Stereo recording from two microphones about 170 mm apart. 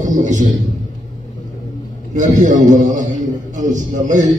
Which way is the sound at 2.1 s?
45° right (ahead or behind).